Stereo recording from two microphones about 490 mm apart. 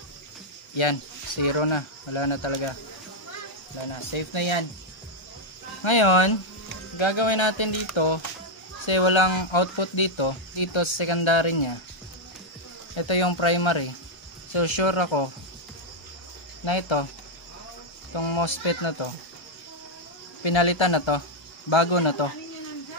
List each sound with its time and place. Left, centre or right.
0.7 s speech: left
3.8 s speech: left
5.9 s speech: left
12.9 s speech: left
16.6 s speech: left
18.1 s speech: left
20.4 s speech: left